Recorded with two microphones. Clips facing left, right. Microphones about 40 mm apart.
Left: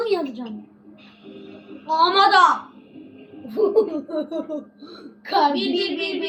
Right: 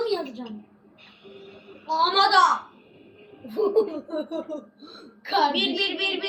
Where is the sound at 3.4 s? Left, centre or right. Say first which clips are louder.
Left 4 dB; centre.